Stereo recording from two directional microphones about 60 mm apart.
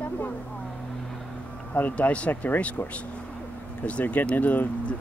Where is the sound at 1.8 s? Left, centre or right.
Left.